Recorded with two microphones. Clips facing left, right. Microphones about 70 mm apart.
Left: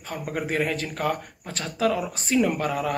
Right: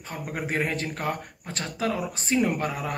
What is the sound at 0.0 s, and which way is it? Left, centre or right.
Speech, right.